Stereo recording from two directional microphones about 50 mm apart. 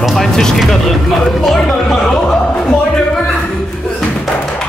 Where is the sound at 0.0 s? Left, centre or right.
Centre.